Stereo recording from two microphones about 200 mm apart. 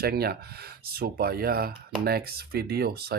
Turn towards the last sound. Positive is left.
turn(degrees=-50)  # may be behind; listen again after turning